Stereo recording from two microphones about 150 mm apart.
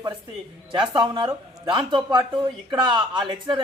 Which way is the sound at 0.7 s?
30° right (ahead or behind).